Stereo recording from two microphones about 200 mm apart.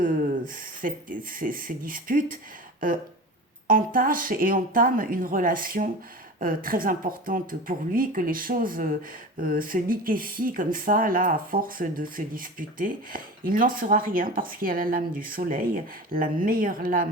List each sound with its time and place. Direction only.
0.0 s speech: 40° right (ahead or behind)